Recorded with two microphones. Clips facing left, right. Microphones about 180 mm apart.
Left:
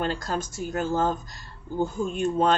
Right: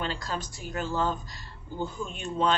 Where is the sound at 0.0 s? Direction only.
45° left (ahead or behind).